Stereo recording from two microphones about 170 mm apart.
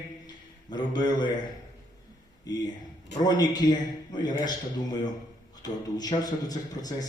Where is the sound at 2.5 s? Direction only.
20° left (ahead or behind).